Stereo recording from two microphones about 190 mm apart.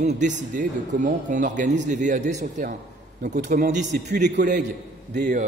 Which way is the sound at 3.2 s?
55° right (ahead or behind).